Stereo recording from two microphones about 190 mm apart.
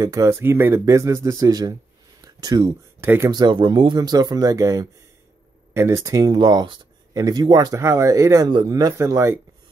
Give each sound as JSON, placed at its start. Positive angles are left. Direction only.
{"t": 0.0, "sound": "speech", "side_deg": -15}
{"t": 3.3, "sound": "speech", "side_deg": -20}